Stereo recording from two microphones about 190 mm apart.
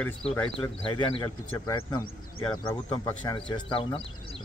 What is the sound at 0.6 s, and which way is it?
Speech, 25° left (ahead or behind).